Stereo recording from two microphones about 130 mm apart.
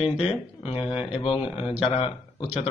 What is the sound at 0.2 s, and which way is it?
Speech, 50° left (ahead or behind).